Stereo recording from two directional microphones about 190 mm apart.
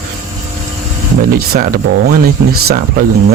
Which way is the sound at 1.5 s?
50° right (ahead or behind).